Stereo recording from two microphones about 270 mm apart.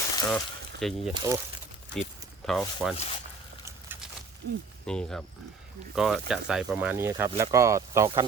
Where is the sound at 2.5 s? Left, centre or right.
Centre.